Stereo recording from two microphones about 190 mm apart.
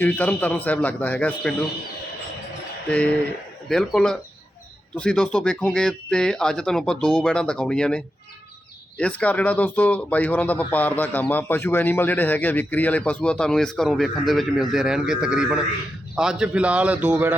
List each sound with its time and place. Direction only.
0.0 s speech: 5° left (ahead or behind)
3.7 s a man's voice: 5° left (ahead or behind)